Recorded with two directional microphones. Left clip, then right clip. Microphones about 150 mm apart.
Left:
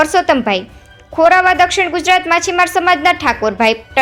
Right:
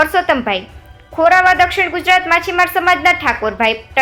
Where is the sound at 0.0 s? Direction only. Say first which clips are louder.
Left 1 dB; 30° left (ahead or behind).